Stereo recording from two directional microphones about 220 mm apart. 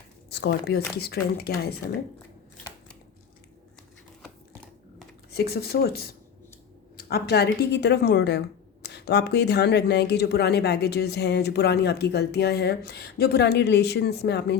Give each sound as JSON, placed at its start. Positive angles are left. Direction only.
{"t": 0.3, "sound": "speech", "side_deg": 50}
{"t": 4.2, "sound": "typing", "side_deg": 5}
{"t": 5.3, "sound": "speech", "side_deg": 45}